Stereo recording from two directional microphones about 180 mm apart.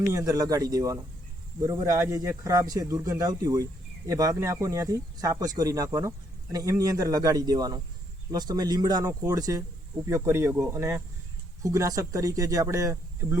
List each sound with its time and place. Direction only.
0.1 s speech: 20° right (ahead or behind)